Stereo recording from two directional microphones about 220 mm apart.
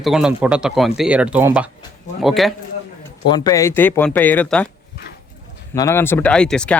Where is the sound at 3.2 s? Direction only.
20° left (ahead or behind).